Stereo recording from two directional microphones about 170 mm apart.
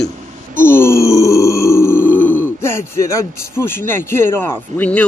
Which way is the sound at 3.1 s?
15° left (ahead or behind).